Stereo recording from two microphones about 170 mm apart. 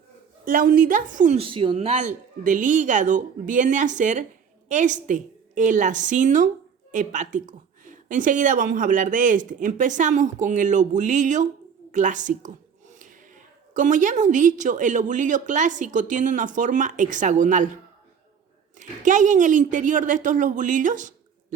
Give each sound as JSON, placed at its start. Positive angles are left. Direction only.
{"t": 0.4, "sound": "a woman's voice", "side_deg": -55}
{"t": 1.5, "sound": "a woman's voice", "side_deg": -30}
{"t": 18.8, "sound": "a woman's voice", "side_deg": -50}